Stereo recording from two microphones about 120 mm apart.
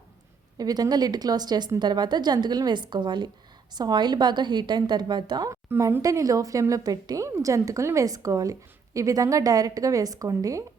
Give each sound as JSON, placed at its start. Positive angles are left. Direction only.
{"t": 0.5, "sound": "a woman's voice", "side_deg": -35}
{"t": 5.5, "sound": "a woman's voice", "side_deg": -25}